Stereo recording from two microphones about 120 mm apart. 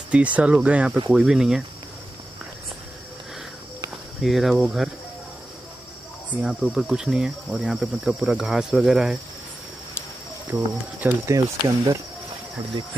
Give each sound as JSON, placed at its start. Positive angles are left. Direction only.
{"t": 0.1, "sound": "speech", "side_deg": -10}
{"t": 1.1, "sound": "cricket", "side_deg": -5}
{"t": 4.2, "sound": "cricket", "side_deg": 0}
{"t": 6.4, "sound": "cricket", "side_deg": -5}
{"t": 10.5, "sound": "speech", "side_deg": -15}
{"t": 11.2, "sound": "speech", "side_deg": -30}